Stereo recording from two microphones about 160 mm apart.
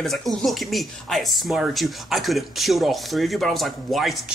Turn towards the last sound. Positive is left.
turn(degrees=0)  # may be behind; listen again after turning